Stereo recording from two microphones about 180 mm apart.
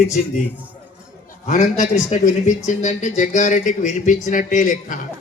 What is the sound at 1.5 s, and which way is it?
Speech, 40° left (ahead or behind).